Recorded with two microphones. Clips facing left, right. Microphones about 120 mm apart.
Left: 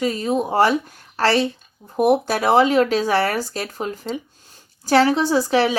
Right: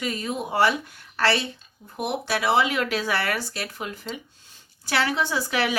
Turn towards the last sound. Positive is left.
turn(degrees=35)  # may be behind; listen again after turning